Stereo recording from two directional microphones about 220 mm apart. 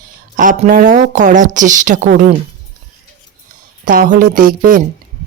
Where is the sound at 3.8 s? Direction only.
40° right (ahead or behind).